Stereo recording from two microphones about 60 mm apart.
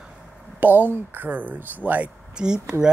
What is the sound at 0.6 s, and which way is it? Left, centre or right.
Speech, right.